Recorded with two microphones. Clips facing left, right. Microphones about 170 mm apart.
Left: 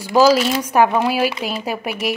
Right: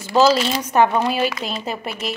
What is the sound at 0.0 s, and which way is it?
Speech, 10° left (ahead or behind).